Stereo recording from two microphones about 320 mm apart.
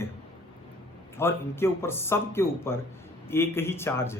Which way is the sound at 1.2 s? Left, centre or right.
Centre.